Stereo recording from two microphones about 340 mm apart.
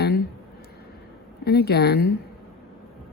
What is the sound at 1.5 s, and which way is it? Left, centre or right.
Speech, left.